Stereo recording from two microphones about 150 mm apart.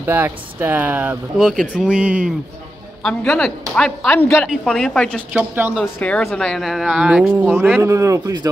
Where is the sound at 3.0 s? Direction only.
5° left (ahead or behind).